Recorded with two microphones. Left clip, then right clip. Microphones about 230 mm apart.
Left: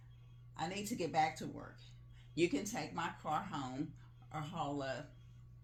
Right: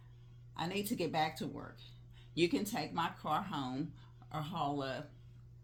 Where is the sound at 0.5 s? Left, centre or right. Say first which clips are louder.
Right 3 dB; right.